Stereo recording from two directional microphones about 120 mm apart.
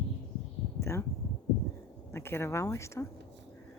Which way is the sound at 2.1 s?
20° left (ahead or behind).